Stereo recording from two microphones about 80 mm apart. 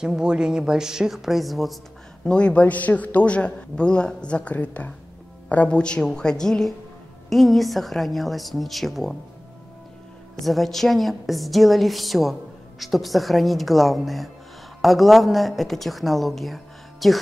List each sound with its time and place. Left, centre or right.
0.0 s speech: centre
2.2 s a man's voice: centre
10.4 s a woman's voice: centre